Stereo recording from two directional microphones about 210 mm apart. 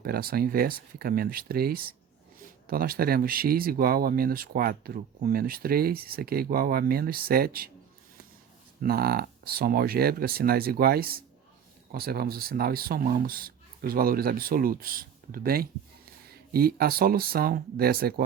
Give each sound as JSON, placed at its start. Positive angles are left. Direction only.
{"t": 0.0, "sound": "speech", "side_deg": -45}
{"t": 8.8, "sound": "speech", "side_deg": -45}